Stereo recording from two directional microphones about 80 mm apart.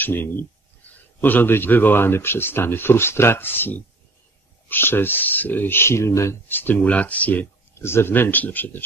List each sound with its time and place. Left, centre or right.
0.0 s speech: left
6.5 s speech: left
7.8 s speech: left